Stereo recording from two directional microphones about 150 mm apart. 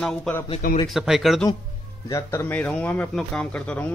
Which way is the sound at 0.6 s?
65° left (ahead or behind).